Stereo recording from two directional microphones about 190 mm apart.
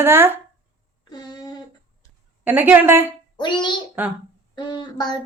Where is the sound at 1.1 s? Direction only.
20° left (ahead or behind).